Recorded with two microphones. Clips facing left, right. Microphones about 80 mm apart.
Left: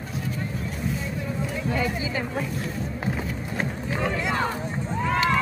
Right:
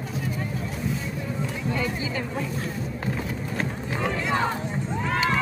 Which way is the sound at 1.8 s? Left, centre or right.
Centre.